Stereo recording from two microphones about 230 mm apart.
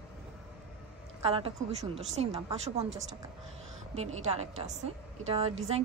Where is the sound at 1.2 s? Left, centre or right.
Right.